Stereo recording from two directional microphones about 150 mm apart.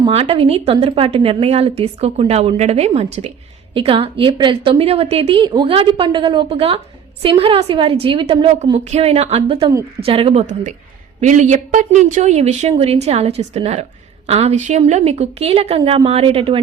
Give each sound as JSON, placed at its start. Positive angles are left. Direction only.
{"t": 0.1, "sound": "a woman's voice", "side_deg": -40}
{"t": 11.2, "sound": "a woman's voice", "side_deg": -50}